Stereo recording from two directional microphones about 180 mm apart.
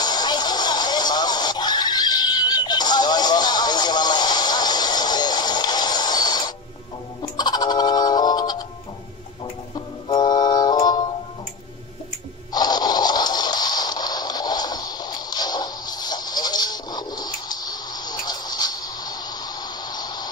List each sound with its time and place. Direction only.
0.0 s music: 25° left (ahead or behind)
9.8 s music: 25° left (ahead or behind)
12.5 s a sound: 20° left (ahead or behind)